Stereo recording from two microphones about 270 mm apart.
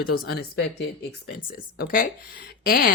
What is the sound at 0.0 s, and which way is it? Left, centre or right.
Speech, left.